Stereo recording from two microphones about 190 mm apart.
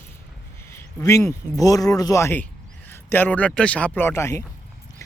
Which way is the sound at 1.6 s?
20° left (ahead or behind).